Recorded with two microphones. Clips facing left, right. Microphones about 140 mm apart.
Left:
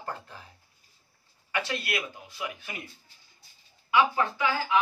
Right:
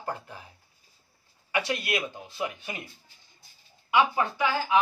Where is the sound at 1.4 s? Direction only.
15° right (ahead or behind).